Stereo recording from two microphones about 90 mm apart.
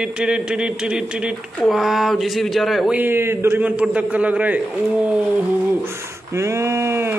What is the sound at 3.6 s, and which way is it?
Speech, 15° right (ahead or behind).